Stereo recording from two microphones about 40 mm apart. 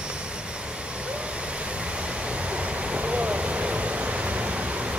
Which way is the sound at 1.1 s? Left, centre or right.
Right.